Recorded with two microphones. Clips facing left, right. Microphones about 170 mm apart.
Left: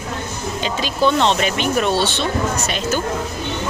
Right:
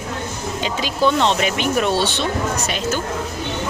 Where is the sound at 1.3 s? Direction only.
10° right (ahead or behind).